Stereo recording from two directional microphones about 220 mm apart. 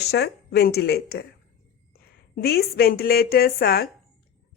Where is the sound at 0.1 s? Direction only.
45° left (ahead or behind).